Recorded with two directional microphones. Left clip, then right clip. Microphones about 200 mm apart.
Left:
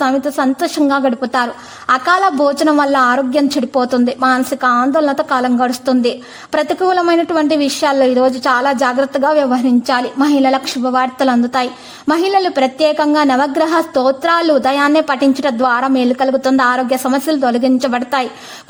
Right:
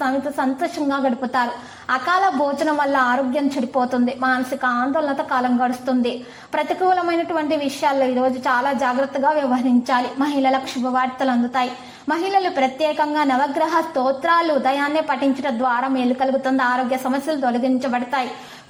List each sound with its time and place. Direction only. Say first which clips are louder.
0.0 s a woman's voice: left 6 dB; 40° left (ahead or behind)